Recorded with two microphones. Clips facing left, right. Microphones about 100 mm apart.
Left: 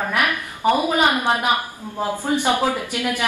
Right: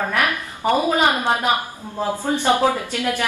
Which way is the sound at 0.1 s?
15° left (ahead or behind).